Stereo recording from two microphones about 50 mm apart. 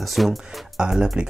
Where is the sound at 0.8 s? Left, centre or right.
Centre.